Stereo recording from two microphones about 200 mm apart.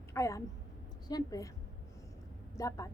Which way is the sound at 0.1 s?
15° left (ahead or behind).